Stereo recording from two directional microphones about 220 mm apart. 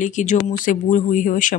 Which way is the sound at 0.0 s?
35° left (ahead or behind).